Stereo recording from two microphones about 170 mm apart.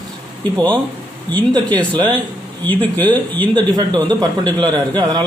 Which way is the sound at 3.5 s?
25° right (ahead or behind).